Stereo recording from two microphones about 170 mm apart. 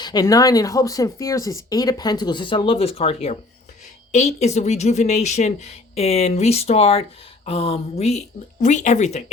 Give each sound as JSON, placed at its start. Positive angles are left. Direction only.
{"t": 0.0, "sound": "speech", "side_deg": 20}